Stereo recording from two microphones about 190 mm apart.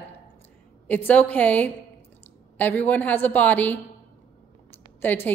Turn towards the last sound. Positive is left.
turn(degrees=10)  # may be behind; listen again after turning